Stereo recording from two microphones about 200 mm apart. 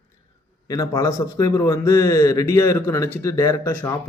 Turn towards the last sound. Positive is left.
turn(degrees=15)  # may be behind; listen again after turning